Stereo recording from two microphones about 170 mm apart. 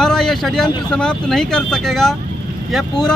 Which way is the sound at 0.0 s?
Centre (ahead or behind).